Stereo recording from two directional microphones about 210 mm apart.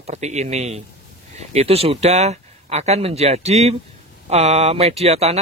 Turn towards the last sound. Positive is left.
turn(degrees=-30)  # may be behind; listen again after turning